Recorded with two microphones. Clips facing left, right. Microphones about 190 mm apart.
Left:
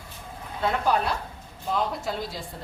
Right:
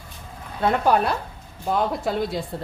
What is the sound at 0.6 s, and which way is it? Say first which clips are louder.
A woman's voice: right 5 dB; 55° right (ahead or behind).